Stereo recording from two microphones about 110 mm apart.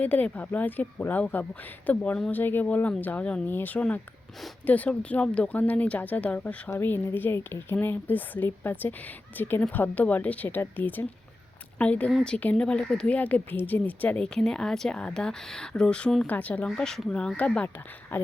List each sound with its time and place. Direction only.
0.0 s speech: 15° left (ahead or behind)